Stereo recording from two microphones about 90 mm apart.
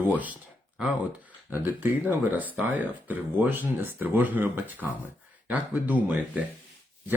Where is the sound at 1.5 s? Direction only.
25° right (ahead or behind).